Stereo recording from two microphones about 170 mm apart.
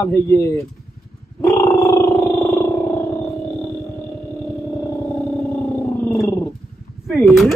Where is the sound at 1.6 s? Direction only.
15° left (ahead or behind).